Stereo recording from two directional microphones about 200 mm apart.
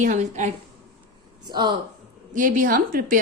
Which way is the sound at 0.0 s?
35° right (ahead or behind).